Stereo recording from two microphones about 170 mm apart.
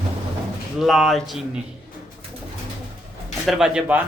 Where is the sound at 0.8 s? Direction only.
Centre (ahead or behind).